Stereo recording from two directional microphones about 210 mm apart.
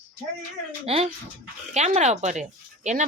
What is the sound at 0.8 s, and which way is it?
A woman's voice, 25° right (ahead or behind).